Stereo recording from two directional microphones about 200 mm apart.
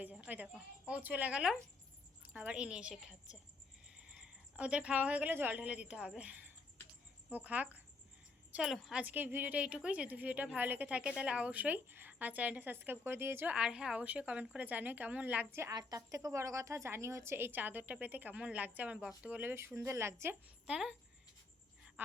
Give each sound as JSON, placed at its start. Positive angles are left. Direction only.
{"t": 0.0, "sound": "a woman's voice", "side_deg": -5}